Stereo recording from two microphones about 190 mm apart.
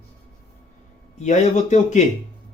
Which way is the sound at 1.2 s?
40° left (ahead or behind).